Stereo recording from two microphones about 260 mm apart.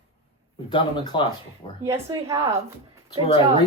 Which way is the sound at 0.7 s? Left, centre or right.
Centre.